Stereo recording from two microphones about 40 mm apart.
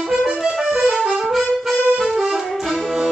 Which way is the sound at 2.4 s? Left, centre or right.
Centre.